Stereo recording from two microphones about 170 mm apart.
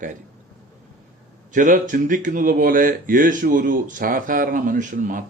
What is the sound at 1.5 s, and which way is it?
Speech, 50° right (ahead or behind).